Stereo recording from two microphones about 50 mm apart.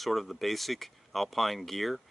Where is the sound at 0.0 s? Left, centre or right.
Centre.